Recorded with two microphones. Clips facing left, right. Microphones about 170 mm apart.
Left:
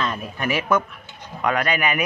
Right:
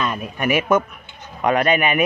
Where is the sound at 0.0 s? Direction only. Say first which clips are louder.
Right 3 dB; 15° right (ahead or behind).